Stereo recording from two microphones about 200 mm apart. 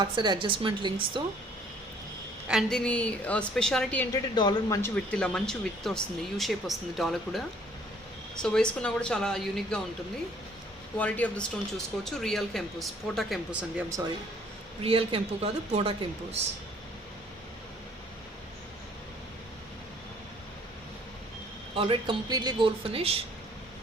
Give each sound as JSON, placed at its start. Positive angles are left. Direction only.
{"t": 0.0, "sound": "speech", "side_deg": -20}
{"t": 2.5, "sound": "speech", "side_deg": 0}
{"t": 4.4, "sound": "speech", "side_deg": 20}
{"t": 5.1, "sound": "speech", "side_deg": 5}
{"t": 10.9, "sound": "speech", "side_deg": 5}
{"t": 14.8, "sound": "speech", "side_deg": -30}
{"t": 21.8, "sound": "speech", "side_deg": -25}